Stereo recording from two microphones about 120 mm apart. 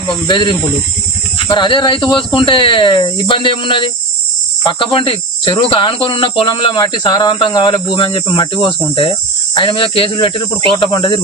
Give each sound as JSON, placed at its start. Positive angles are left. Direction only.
{"t": 0.3, "sound": "speech", "side_deg": 40}